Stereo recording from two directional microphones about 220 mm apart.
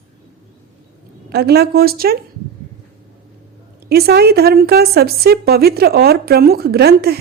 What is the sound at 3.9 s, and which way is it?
A woman's voice, 45° right (ahead or behind).